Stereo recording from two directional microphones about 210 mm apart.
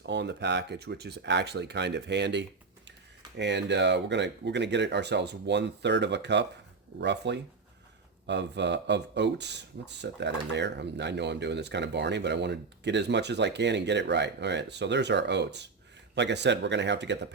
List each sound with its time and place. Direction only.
0.0 s speech: 55° right (ahead or behind)